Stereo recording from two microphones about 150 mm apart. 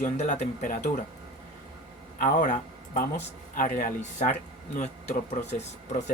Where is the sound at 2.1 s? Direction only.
65° left (ahead or behind).